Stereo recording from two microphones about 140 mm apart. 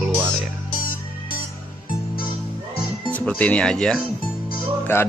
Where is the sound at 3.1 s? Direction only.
10° left (ahead or behind).